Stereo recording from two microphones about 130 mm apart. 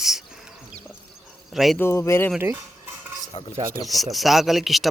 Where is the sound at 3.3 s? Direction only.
55° left (ahead or behind).